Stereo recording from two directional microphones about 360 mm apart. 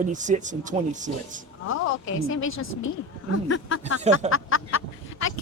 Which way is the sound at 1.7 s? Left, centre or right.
Left.